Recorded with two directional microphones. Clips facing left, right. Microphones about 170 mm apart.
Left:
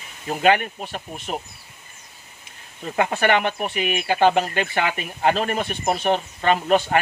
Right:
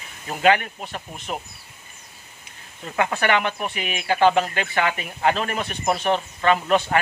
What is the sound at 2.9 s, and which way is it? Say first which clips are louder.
Speech: left 2 dB; 35° left (ahead or behind).